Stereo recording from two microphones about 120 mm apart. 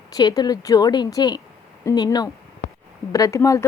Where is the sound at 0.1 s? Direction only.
35° left (ahead or behind).